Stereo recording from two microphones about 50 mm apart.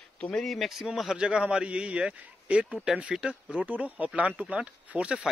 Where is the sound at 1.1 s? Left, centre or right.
Centre.